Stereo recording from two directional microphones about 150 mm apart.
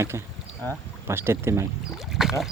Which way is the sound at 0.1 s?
15° right (ahead or behind).